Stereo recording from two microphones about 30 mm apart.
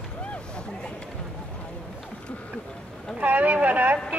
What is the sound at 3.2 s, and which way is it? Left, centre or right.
Boat, right.